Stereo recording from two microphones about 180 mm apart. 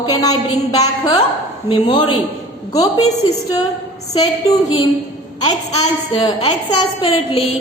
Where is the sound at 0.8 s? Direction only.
20° left (ahead or behind).